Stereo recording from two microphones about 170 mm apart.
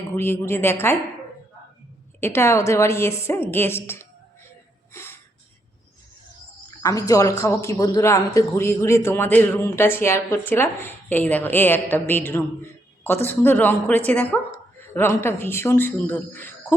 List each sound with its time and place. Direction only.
0.2 s a man's voice: 15° left (ahead or behind)
2.2 s a man's voice: 15° left (ahead or behind)
4.9 s a sound: 15° left (ahead or behind)
6.8 s a man's voice: 20° left (ahead or behind)